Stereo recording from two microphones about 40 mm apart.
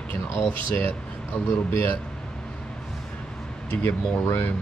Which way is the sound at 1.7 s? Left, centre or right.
Left.